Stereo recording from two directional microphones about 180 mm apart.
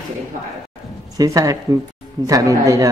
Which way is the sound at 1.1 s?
20° right (ahead or behind).